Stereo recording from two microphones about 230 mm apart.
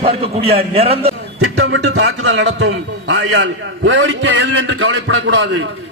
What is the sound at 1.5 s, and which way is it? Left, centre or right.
A man's voice, right.